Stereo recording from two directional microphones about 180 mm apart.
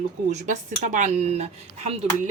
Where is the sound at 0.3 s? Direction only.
40° right (ahead or behind).